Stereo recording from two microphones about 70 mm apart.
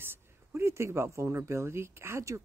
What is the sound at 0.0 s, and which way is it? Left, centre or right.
Speech, right.